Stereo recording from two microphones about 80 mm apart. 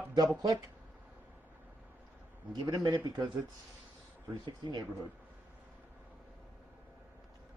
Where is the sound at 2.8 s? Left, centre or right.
Right.